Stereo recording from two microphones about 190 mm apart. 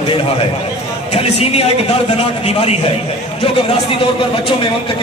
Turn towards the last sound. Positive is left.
turn(degrees=30)  # may be behind; listen again after turning